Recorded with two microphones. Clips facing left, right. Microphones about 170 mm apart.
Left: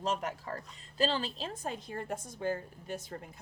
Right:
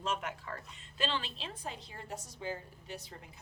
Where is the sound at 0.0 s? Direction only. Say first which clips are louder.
Left 3 dB; 35° left (ahead or behind).